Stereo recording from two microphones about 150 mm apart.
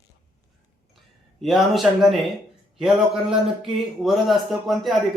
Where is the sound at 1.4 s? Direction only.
Centre (ahead or behind).